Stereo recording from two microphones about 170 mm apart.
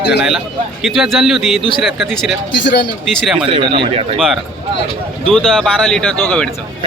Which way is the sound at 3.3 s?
30° right (ahead or behind).